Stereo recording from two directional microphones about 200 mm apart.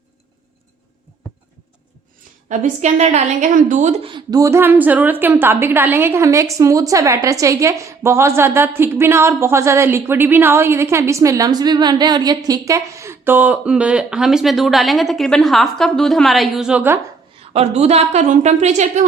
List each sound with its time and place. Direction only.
2.5 s a woman's voice: 35° right (ahead or behind); by 17.0 s 10° right (ahead or behind)
17.4 s a woman's voice: 30° right (ahead or behind)